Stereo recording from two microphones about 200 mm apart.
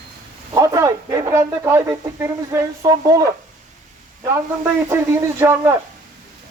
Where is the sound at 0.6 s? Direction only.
15° right (ahead or behind).